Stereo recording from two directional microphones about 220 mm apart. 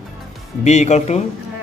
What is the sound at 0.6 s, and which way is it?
Speech, 30° left (ahead or behind).